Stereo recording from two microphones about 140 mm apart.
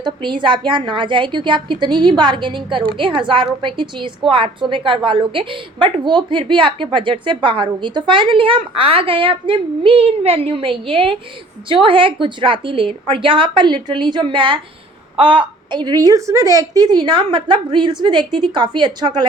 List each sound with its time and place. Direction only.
0.0 s a woman's voice: 35° right (ahead or behind)